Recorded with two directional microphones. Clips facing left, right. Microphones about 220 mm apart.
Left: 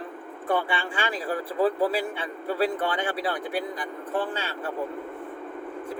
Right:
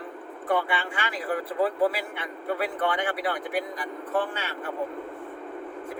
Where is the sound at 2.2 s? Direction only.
30° left (ahead or behind).